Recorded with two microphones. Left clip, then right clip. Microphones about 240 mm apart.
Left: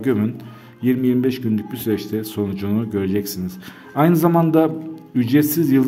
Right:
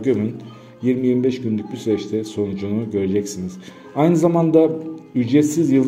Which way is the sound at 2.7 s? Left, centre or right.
Left.